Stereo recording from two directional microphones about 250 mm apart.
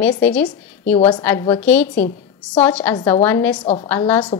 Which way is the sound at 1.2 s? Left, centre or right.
Centre.